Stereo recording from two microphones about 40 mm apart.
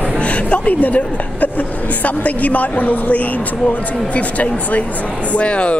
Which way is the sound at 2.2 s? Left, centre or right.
Left.